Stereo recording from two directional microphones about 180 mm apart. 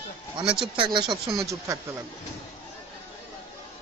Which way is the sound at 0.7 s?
30° right (ahead or behind).